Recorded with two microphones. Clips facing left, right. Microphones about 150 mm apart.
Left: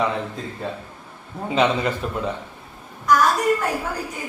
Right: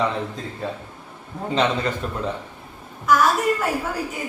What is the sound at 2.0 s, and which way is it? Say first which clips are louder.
Speech: left 2 dB; 5° left (ahead or behind).